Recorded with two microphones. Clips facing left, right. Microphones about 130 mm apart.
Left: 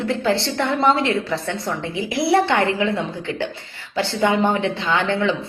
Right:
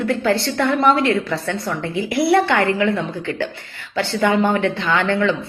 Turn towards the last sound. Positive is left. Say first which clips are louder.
# right 2 dB
turn(degrees=20)  # may be behind; listen again after turning